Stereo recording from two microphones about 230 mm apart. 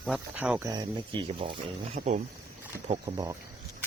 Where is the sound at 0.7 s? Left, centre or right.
Centre.